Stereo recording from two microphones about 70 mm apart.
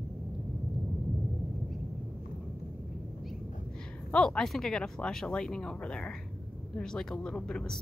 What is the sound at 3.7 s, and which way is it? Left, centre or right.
Speech, centre.